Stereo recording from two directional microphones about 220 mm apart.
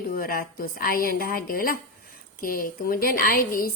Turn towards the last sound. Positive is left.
turn(degrees=40)  # may be behind; listen again after turning